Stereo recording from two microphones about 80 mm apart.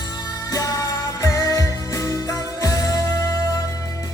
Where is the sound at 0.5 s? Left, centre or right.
Left.